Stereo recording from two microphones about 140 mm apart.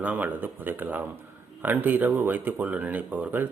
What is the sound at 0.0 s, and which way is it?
Speech, 10° right (ahead or behind).